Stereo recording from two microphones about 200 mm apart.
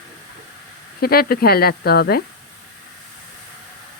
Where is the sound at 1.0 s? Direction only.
50° left (ahead or behind).